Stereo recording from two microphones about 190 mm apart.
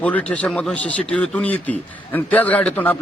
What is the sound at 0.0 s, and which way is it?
A man's voice, 10° left (ahead or behind).